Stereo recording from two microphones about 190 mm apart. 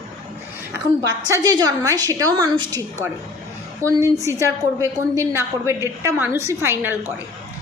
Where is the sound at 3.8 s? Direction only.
15° right (ahead or behind).